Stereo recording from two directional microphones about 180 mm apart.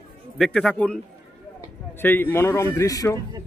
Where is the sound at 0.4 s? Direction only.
5° left (ahead or behind).